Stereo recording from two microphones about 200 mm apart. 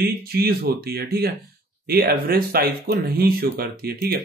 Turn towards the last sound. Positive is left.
turn(degrees=-50)  # may be behind; listen again after turning